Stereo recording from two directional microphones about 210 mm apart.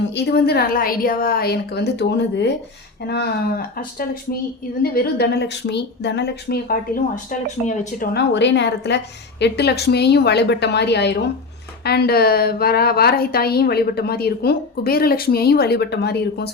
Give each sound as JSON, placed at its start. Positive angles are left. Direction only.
{"t": 0.1, "sound": "a woman's voice", "side_deg": 50}
{"t": 3.8, "sound": "a woman's voice", "side_deg": 45}
{"t": 8.1, "sound": "a woman's voice", "side_deg": 55}